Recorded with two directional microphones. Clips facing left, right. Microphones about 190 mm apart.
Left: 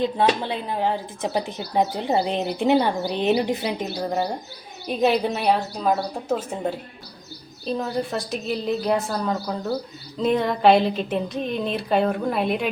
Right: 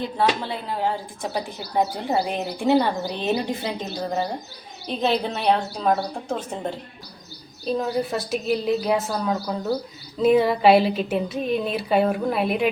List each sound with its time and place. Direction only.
0.0 s a woman's voice: 20° left (ahead or behind); by 12.6 s centre (ahead or behind)